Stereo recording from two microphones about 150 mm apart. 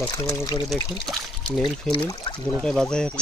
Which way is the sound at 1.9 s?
30° left (ahead or behind).